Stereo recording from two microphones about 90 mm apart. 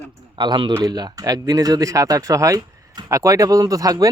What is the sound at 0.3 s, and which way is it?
Speech, 55° right (ahead or behind).